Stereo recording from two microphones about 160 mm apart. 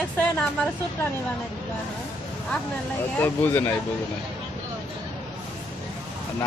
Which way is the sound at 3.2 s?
10° left (ahead or behind).